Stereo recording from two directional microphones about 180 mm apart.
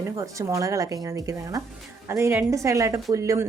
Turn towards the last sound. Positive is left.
turn(degrees=-20)  # may be behind; listen again after turning